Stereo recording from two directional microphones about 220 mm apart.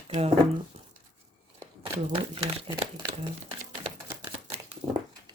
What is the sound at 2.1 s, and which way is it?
Speech, 25° right (ahead or behind).